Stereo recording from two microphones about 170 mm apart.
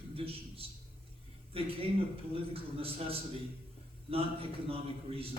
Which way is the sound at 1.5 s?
35° right (ahead or behind).